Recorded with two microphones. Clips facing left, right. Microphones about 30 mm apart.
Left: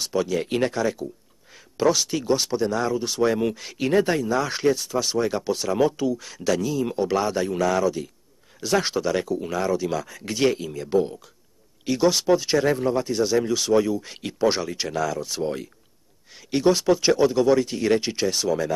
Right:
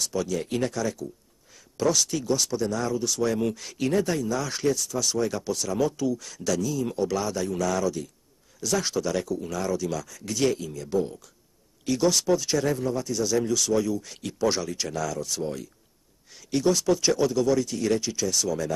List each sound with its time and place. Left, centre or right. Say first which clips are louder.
0.0 s speech: left 4 dB; left
3.9 s speech: left 5 dB; left